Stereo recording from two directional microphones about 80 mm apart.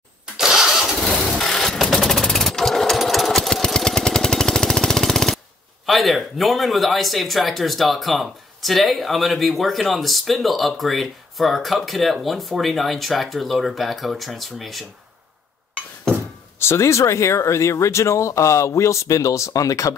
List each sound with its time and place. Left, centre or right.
0.4 s engine starting: centre
5.9 s speech: centre
16.5 s speech: left